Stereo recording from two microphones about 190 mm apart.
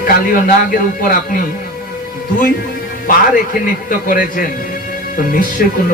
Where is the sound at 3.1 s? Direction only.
50° left (ahead or behind).